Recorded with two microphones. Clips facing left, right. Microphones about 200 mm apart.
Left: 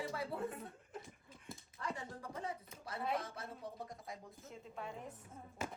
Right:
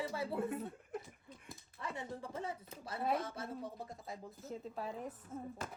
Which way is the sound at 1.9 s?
25° right (ahead or behind).